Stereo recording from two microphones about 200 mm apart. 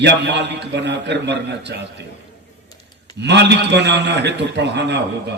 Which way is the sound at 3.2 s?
60° right (ahead or behind).